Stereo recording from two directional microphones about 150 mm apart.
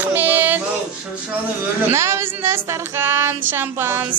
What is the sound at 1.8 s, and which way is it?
A woman's voice, 20° right (ahead or behind).